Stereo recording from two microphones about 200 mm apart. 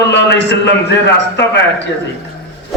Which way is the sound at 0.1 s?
60° left (ahead or behind).